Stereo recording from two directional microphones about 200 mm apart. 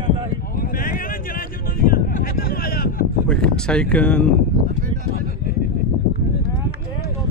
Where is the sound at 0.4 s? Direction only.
45° left (ahead or behind).